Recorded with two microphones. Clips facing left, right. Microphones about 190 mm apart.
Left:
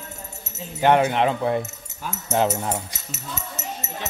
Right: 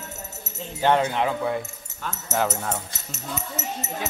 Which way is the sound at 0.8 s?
15° left (ahead or behind).